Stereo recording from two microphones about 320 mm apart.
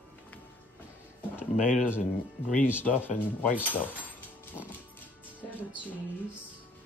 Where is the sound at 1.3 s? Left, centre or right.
Centre.